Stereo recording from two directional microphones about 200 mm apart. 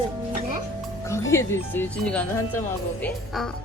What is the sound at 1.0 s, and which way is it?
A child's voice, 15° left (ahead or behind).